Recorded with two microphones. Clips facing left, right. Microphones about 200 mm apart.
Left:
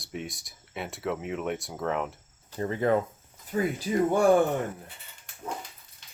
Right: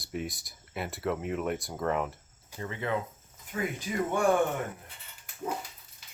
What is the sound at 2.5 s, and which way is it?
Speech, 40° left (ahead or behind).